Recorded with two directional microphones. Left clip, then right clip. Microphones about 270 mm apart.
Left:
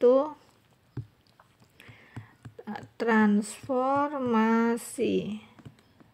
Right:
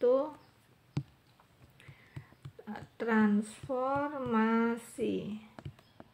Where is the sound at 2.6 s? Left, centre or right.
Left.